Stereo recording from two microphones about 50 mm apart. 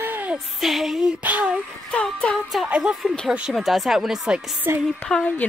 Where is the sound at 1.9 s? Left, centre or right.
Left.